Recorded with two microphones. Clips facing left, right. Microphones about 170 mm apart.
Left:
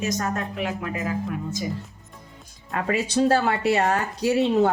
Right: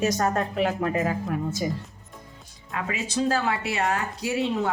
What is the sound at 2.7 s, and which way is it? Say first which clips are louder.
Speech: left 5 dB; 40° left (ahead or behind).